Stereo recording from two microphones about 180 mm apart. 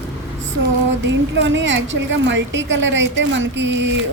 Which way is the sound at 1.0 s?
90° right.